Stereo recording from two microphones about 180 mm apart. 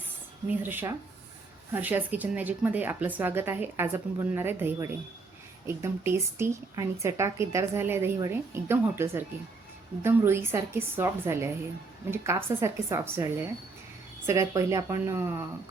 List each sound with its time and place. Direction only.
0.4 s a woman's voice: 10° right (ahead or behind)